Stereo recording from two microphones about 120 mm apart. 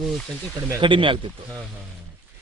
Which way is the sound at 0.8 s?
45° right (ahead or behind).